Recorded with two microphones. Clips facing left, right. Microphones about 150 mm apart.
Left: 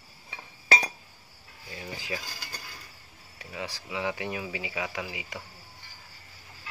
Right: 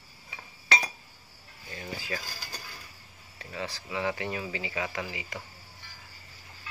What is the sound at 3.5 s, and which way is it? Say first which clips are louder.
Speech: right 1 dB; 15° left (ahead or behind).